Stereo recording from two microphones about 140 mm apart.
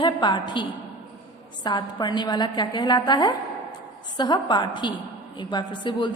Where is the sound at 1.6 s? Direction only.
30° left (ahead or behind).